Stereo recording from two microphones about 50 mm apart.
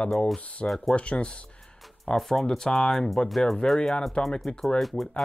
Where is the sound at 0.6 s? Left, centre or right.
Centre.